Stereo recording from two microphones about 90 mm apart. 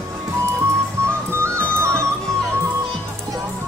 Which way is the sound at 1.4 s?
30° right (ahead or behind).